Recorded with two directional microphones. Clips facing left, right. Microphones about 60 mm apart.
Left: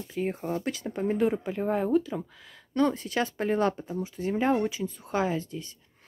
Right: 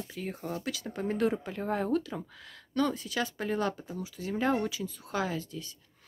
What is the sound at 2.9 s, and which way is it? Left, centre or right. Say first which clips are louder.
Speech: left 4 dB; left.